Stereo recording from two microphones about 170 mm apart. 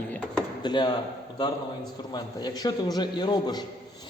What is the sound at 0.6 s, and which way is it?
Speech, 25° left (ahead or behind).